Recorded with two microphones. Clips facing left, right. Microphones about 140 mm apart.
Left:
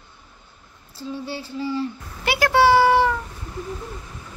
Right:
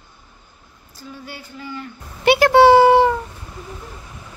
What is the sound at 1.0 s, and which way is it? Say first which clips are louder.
Speech: left 6 dB; 30° left (ahead or behind).